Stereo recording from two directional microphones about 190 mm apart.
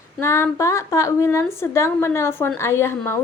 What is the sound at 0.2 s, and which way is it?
A woman's voice, 10° left (ahead or behind).